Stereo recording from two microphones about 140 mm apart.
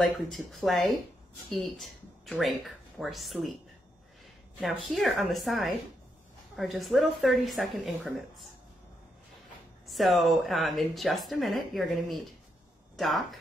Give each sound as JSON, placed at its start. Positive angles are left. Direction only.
{"t": 0.0, "sound": "speech", "side_deg": 0}
{"t": 4.6, "sound": "speech", "side_deg": 5}
{"t": 9.8, "sound": "speech", "side_deg": 0}